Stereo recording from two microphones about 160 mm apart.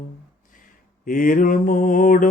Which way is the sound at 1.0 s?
60° left (ahead or behind).